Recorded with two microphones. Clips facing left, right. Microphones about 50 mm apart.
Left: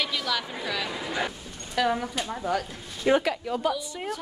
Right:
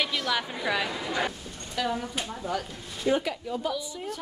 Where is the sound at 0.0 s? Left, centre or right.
Centre.